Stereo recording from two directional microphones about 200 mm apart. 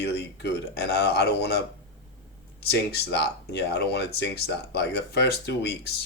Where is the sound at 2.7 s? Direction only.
55° left (ahead or behind).